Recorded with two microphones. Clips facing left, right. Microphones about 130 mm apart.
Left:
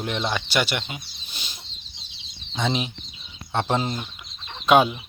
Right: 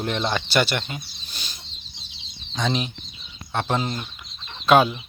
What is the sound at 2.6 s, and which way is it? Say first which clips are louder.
Speech: even; 20° left (ahead or behind).